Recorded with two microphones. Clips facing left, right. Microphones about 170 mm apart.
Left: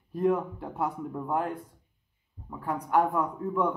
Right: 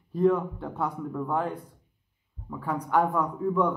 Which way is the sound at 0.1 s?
10° left (ahead or behind).